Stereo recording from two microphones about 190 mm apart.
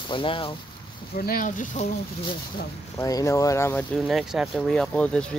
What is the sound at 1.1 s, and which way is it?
Speech, 50° left (ahead or behind).